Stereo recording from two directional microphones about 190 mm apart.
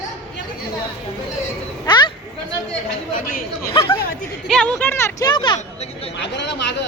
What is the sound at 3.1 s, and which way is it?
Speech, 50° left (ahead or behind).